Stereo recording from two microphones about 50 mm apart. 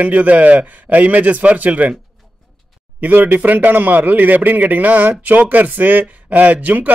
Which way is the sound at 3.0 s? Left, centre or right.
Right.